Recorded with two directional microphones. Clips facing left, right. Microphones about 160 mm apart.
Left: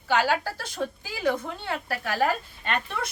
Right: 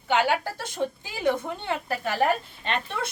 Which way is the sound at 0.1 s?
20° right (ahead or behind).